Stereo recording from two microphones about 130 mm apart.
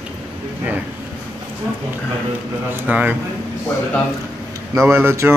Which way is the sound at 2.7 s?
10° right (ahead or behind).